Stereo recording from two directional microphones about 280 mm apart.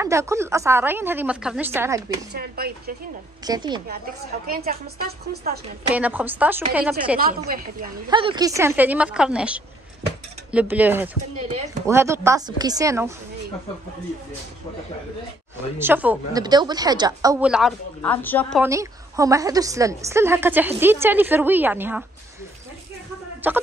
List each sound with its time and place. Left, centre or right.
0.0 s a woman's voice: centre
2.3 s a woman's voice: right
3.4 s a woman's voice: centre
4.5 s a woman's voice: right
5.9 s a woman's voice: centre
7.2 s a woman's voice: right
8.1 s a woman's voice: centre
15.8 s a woman's voice: centre
18.6 s a woman's voice: centre
23.4 s a sound: centre